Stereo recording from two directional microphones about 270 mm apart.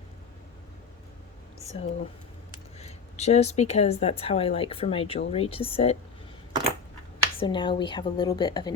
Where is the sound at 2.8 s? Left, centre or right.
Left.